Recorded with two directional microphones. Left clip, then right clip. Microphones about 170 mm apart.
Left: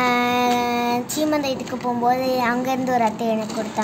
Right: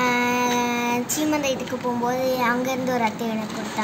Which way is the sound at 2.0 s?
35° left (ahead or behind).